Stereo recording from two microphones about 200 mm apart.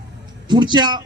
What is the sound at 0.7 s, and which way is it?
Speech, 20° right (ahead or behind).